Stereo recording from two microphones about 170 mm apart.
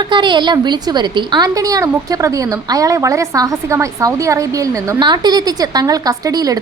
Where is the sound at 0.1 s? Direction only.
25° right (ahead or behind).